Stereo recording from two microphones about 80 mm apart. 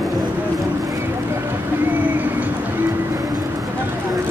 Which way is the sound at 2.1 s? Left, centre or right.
Right.